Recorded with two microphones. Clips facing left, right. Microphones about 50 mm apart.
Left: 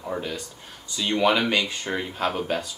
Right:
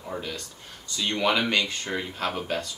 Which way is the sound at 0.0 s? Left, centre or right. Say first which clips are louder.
Left 4 dB; centre.